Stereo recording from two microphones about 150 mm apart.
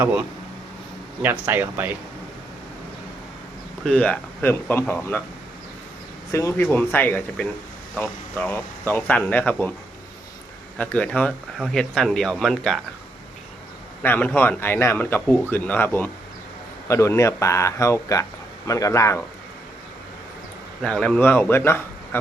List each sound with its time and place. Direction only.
0.0 s speech: 5° right (ahead or behind)
3.8 s speech: 10° left (ahead or behind)
6.3 s speech: 15° left (ahead or behind)
10.8 s speech: 10° left (ahead or behind)
14.0 s a man's voice: 15° left (ahead or behind)
20.8 s speech: 5° left (ahead or behind)